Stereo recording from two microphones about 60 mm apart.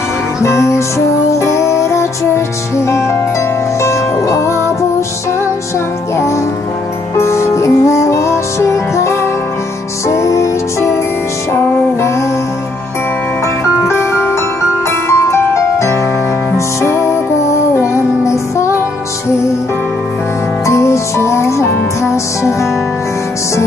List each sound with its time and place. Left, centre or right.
0.4 s music: left
3.8 s music: left
7.2 s music: left
13.8 s music: left
20.6 s music: left